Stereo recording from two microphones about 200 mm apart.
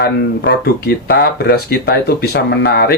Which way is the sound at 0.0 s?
55° left (ahead or behind).